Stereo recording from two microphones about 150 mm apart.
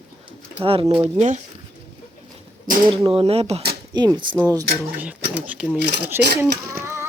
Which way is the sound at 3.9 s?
30° right (ahead or behind).